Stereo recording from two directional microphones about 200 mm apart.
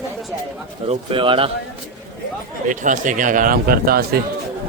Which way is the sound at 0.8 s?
30° right (ahead or behind).